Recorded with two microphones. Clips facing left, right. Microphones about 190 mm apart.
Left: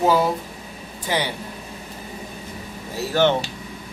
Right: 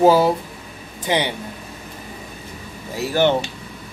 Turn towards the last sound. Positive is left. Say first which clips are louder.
# right 1 dB
turn(degrees=-15)  # may be behind; listen again after turning